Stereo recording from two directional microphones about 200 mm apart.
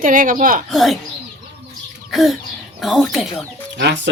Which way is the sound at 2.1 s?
Centre (ahead or behind).